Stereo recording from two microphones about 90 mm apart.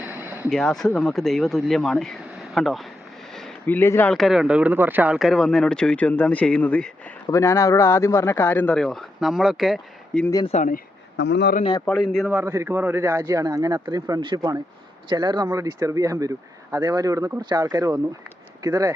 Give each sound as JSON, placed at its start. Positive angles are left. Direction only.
{"t": 0.0, "sound": "a sound", "side_deg": -20}
{"t": 0.5, "sound": "speech", "side_deg": 5}
{"t": 3.7, "sound": "speech", "side_deg": 25}
{"t": 4.1, "sound": "speech", "side_deg": -5}
{"t": 5.1, "sound": "speech", "side_deg": 0}
{"t": 7.3, "sound": "speech", "side_deg": 30}
{"t": 8.7, "sound": "speech", "side_deg": 5}
{"t": 10.1, "sound": "speech", "side_deg": 5}
{"t": 11.9, "sound": "speech", "side_deg": 0}
{"t": 12.5, "sound": "a man's voice", "side_deg": -25}
{"t": 14.2, "sound": "speech", "side_deg": -55}
{"t": 15.5, "sound": "a man's voice", "side_deg": -40}